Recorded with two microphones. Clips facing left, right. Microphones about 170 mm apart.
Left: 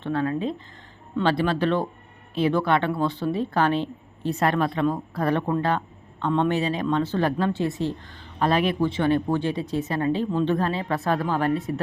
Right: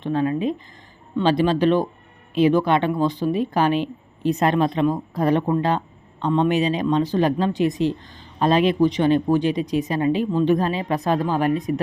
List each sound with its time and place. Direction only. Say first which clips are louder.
0.0 s a woman's voice: right 3 dB; 15° right (ahead or behind)